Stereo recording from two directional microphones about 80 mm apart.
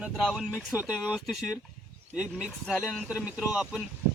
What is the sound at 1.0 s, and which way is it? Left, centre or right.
A man's voice, centre.